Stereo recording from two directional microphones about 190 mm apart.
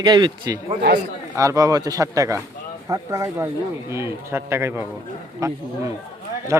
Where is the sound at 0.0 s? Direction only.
25° right (ahead or behind).